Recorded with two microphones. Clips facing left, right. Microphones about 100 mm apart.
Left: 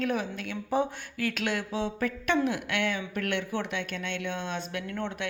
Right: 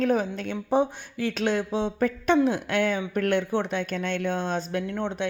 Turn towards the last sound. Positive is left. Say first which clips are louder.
# right 5 dB
turn(degrees=-30)  # may be behind; listen again after turning